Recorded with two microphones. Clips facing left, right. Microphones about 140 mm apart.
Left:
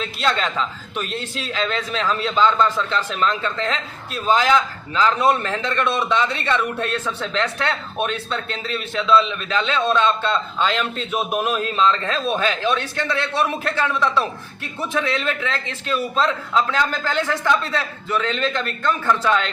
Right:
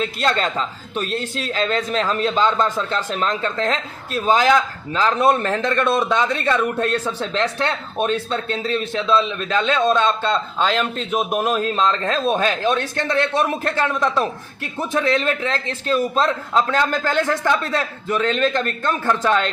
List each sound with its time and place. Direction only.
0.0 s a man's voice: 40° right (ahead or behind)